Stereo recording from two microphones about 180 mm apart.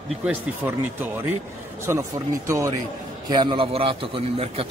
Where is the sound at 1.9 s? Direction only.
15° right (ahead or behind).